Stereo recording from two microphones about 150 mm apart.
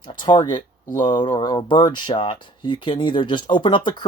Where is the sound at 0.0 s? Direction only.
30° left (ahead or behind).